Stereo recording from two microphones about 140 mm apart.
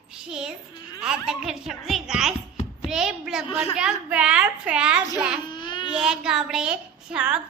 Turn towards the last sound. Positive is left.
turn(degrees=-5)  # may be behind; listen again after turning